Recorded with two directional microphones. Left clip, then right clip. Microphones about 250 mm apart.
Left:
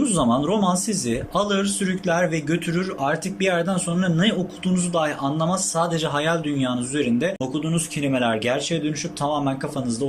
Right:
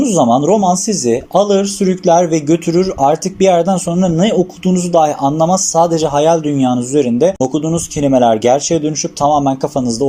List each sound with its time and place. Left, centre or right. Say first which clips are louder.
0.0 s speech: right 10 dB; centre